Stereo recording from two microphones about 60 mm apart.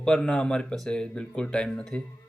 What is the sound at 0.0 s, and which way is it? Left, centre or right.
Speech, centre.